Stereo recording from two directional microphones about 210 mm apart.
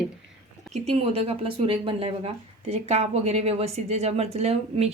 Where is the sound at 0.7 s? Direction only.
30° right (ahead or behind).